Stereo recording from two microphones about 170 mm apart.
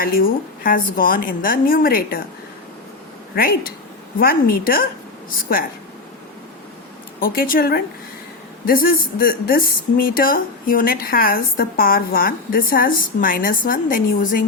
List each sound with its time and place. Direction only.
0.0 s speech: 60° left (ahead or behind)
3.3 s speech: 60° left (ahead or behind)
7.2 s speech: 60° left (ahead or behind)